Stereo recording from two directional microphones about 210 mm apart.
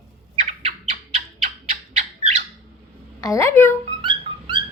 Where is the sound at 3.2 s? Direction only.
15° left (ahead or behind).